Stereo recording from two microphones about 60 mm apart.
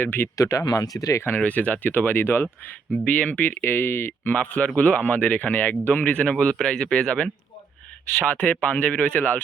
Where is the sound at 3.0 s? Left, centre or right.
Left.